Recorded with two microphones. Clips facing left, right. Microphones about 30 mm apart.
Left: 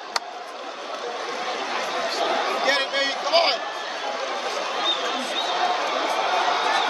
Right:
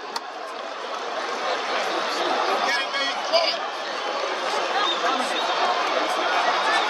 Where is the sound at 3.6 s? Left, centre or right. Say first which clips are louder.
Right 1 dB; right.